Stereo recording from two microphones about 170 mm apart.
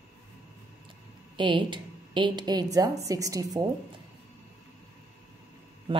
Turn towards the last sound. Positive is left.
turn(degrees=-30)  # may be behind; listen again after turning